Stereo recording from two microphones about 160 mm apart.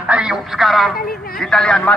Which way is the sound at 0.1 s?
5° right (ahead or behind).